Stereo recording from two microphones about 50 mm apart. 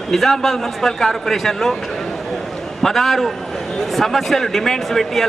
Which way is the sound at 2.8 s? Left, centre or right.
Centre.